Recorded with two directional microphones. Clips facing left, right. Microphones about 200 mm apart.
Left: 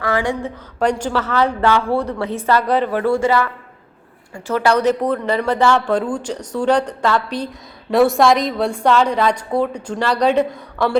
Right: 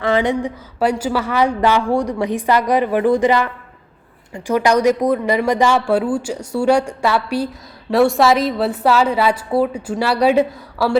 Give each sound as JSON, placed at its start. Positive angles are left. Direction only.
{"t": 0.0, "sound": "a woman's voice", "side_deg": -20}
{"t": 0.8, "sound": "speech", "side_deg": -5}